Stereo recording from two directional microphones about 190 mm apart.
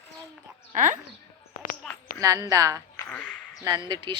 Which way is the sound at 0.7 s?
40° right (ahead or behind).